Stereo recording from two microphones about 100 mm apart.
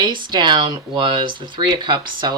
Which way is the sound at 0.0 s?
50° right (ahead or behind).